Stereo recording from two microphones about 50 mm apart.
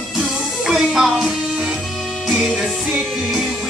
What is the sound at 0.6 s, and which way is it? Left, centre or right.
Speech, centre.